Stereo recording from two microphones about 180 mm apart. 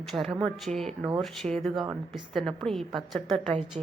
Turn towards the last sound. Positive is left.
turn(degrees=-30)  # may be behind; listen again after turning